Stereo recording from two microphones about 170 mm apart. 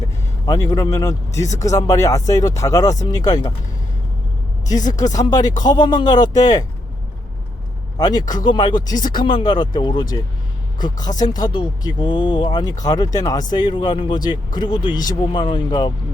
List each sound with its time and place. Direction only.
0.4 s speech: 25° left (ahead or behind)
4.6 s speech: 20° left (ahead or behind)
7.9 s a man's voice: 25° left (ahead or behind)